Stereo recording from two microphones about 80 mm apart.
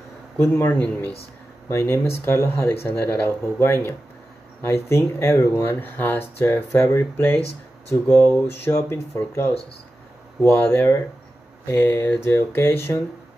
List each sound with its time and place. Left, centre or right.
0.4 s speech: left
1.7 s speech: left